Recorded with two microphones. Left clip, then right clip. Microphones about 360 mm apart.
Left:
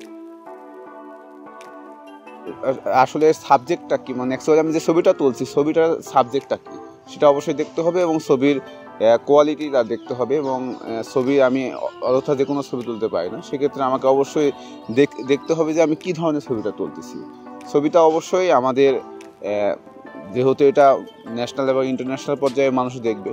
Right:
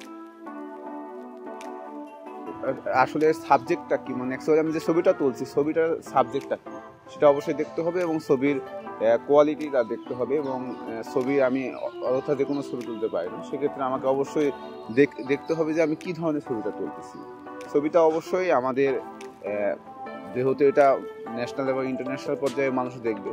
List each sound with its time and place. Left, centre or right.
2.6 s speech: centre
17.7 s speech: left